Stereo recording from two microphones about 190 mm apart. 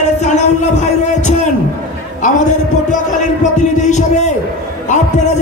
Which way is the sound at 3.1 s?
40° left (ahead or behind).